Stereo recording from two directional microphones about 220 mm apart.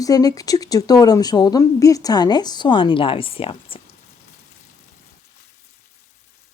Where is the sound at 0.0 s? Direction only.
15° left (ahead or behind).